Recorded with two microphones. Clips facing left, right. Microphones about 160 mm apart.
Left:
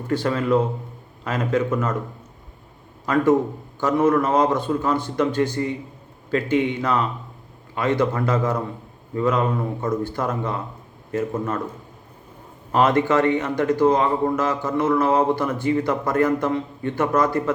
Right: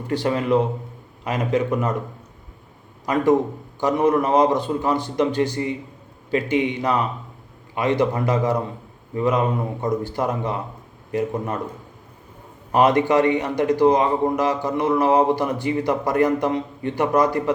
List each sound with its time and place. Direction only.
0.1 s a man's voice: 15° right (ahead or behind)
3.1 s a man's voice: 15° right (ahead or behind)
12.7 s a man's voice: 15° right (ahead or behind)